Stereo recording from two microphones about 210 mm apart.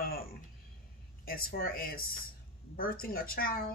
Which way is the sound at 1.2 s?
45° left (ahead or behind).